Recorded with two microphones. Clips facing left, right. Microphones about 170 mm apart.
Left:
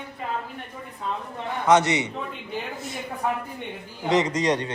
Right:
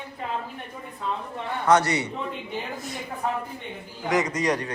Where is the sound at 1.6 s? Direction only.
20° left (ahead or behind).